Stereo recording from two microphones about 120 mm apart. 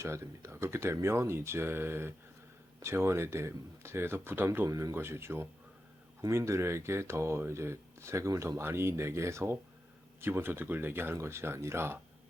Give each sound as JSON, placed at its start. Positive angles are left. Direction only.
{"t": 0.0, "sound": "speech", "side_deg": -25}